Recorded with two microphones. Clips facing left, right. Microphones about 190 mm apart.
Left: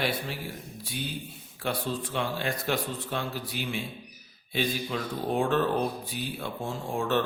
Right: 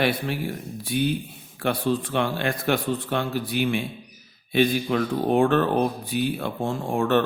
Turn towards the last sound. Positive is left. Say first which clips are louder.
# right 6 dB
turn(degrees=-60)  # may be behind; listen again after turning